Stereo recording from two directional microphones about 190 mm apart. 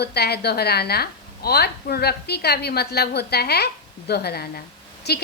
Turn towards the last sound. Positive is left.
turn(degrees=60)  # may be behind; listen again after turning